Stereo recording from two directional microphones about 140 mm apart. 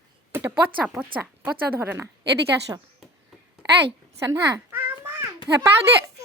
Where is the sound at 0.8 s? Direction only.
10° right (ahead or behind).